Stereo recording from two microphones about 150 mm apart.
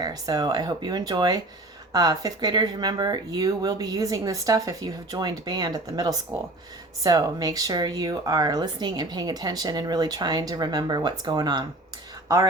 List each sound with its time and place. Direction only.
0.0 s speech: 25° right (ahead or behind)